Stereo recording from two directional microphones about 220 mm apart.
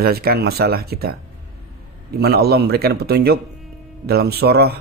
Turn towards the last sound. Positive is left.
turn(degrees=-45)  # may be behind; listen again after turning